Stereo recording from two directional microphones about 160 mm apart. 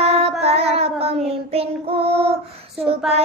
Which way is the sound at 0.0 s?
40° right (ahead or behind).